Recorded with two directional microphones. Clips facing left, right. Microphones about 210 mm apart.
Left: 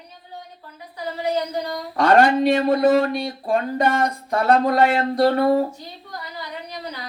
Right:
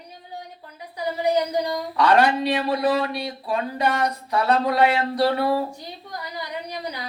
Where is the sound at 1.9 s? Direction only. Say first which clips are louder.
Left 3 dB; 45° left (ahead or behind).